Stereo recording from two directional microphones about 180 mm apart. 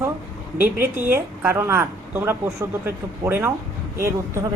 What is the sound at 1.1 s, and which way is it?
A woman's voice, 10° right (ahead or behind).